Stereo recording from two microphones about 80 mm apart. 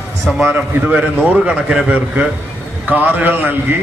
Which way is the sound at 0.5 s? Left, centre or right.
Centre.